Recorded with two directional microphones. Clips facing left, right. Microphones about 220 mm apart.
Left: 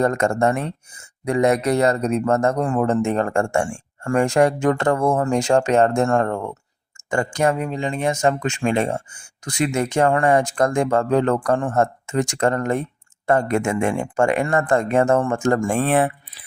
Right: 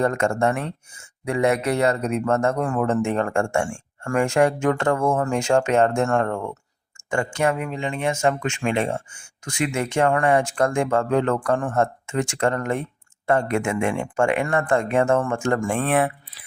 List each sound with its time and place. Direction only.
0.0 s speech: 40° left (ahead or behind)